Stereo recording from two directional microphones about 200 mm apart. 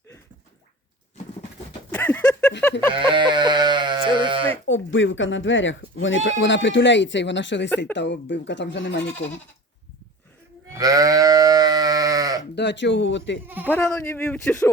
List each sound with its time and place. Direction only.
1.9 s a sound: 10° left (ahead or behind)
2.9 s goat: 25° right (ahead or behind)
4.6 s speech: 70° left (ahead or behind)
10.7 s sheep: 15° right (ahead or behind)
12.5 s speech: 60° left (ahead or behind)
13.7 s speech: 10° left (ahead or behind)